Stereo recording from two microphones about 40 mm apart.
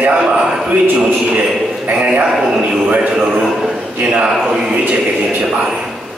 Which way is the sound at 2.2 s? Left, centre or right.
Centre.